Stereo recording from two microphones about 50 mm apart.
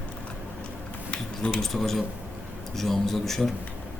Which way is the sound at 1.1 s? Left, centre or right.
Left.